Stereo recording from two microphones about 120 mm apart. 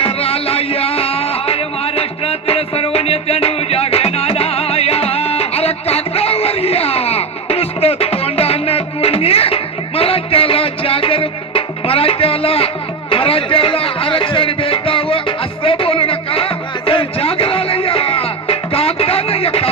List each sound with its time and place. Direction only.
0.0 s music: 55° left (ahead or behind)